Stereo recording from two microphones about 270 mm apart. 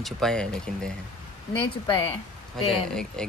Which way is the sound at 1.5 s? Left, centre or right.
Centre.